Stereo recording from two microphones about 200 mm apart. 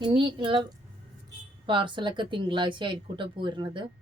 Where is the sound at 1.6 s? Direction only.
25° right (ahead or behind).